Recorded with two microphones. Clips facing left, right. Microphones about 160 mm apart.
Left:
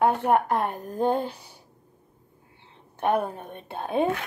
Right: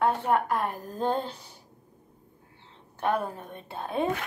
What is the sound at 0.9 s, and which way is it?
Speech, 10° left (ahead or behind).